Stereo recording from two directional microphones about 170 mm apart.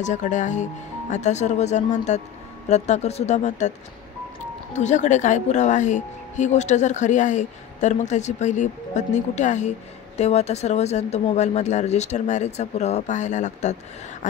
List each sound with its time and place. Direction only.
0.0 s speech: 45° left (ahead or behind)
4.7 s speech: 45° left (ahead or behind)